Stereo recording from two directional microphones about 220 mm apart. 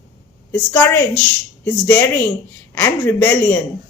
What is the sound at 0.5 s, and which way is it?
Speech, 10° left (ahead or behind).